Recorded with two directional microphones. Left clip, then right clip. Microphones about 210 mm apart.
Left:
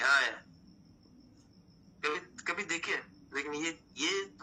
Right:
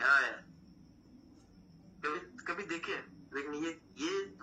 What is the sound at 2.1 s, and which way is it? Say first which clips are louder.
Speech: left 3 dB; 35° left (ahead or behind).